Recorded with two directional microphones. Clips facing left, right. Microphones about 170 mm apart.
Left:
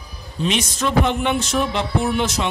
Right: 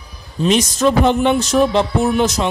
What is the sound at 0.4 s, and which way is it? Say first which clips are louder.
Speech: right 7 dB; 40° right (ahead or behind).